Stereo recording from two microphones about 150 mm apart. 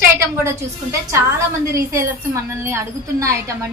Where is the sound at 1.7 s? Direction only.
20° right (ahead or behind).